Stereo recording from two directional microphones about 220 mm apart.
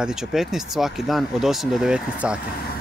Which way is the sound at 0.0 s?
Centre (ahead or behind).